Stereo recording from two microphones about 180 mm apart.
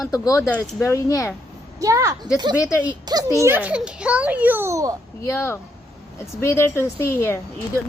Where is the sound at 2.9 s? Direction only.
20° right (ahead or behind).